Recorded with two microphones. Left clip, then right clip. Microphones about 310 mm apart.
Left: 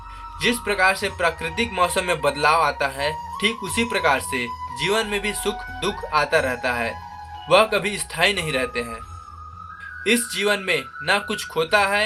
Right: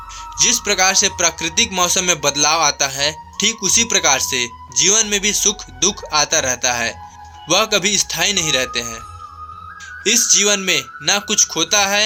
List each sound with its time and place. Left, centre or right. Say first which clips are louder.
0.6 s music: right 2 dB; right
10.0 s music: right 6 dB; right